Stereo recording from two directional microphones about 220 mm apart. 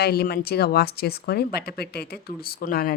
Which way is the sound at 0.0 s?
45° left (ahead or behind).